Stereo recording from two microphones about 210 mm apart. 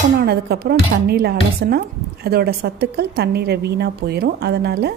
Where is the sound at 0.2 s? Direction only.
50° right (ahead or behind).